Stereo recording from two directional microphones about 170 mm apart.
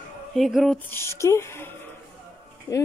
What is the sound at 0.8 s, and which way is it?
Speech, 15° left (ahead or behind).